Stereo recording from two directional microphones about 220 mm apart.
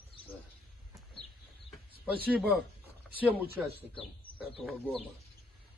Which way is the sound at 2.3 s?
5° right (ahead or behind).